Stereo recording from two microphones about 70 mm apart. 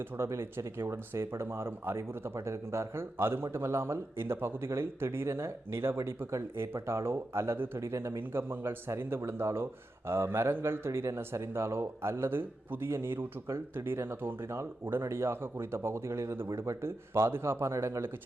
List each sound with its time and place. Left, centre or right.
0.0 s speech: right